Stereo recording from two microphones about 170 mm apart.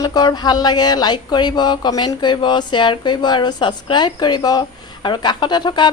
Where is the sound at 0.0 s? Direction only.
25° left (ahead or behind).